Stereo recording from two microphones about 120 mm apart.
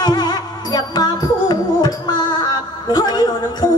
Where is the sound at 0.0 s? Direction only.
35° left (ahead or behind).